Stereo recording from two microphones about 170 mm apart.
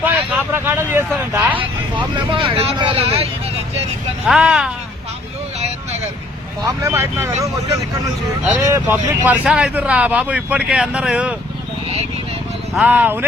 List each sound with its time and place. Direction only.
0.0 s speech: 10° right (ahead or behind)
2.0 s speech: 30° right (ahead or behind)
4.3 s speech: 5° right (ahead or behind)
6.6 s speech: 15° right (ahead or behind)
8.4 s speech: 10° right (ahead or behind)
12.7 s speech: 10° right (ahead or behind)